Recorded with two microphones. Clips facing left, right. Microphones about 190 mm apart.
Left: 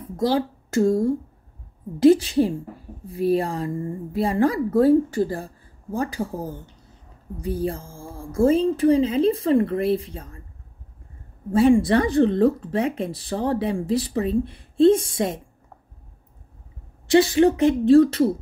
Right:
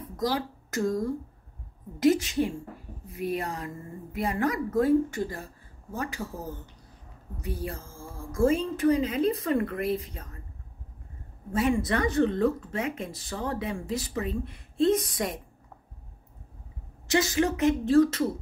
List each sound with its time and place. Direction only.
0.0 s speech: 30° left (ahead or behind)
11.5 s speech: 30° left (ahead or behind)
17.1 s speech: 30° left (ahead or behind)